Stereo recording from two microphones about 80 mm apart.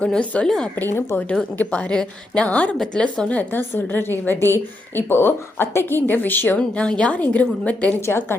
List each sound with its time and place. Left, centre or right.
0.0 s a woman's voice: centre
0.8 s a woman's voice: left
1.5 s a woman's voice: centre
3.5 s a woman's voice: left
8.0 s a woman's voice: left